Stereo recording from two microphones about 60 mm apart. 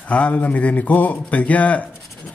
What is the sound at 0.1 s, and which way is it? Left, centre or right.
Speech, left.